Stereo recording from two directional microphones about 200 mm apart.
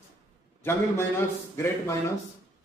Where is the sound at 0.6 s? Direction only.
10° left (ahead or behind).